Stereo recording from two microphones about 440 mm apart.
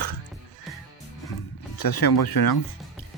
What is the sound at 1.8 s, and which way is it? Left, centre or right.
Speech, left.